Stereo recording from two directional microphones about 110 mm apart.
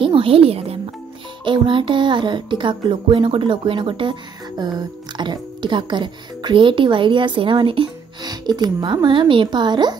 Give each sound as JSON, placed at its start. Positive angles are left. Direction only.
{"t": 0.0, "sound": "speech", "side_deg": -55}
{"t": 1.4, "sound": "music", "side_deg": -50}
{"t": 8.2, "sound": "a woman's voice", "side_deg": -40}